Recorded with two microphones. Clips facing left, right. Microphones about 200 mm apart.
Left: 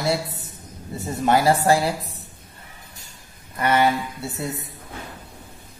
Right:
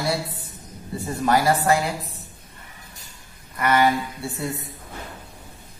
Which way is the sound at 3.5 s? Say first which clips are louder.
Even; 30° left (ahead or behind).